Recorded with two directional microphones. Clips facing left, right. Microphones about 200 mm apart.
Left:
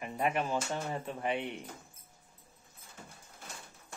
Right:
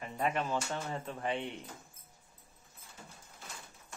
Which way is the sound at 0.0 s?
15° left (ahead or behind).